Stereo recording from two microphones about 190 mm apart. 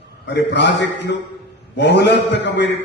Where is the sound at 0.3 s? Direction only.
65° left (ahead or behind).